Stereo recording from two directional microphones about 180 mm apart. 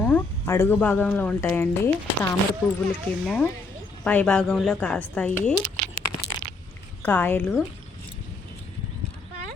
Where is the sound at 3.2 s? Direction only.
5° left (ahead or behind).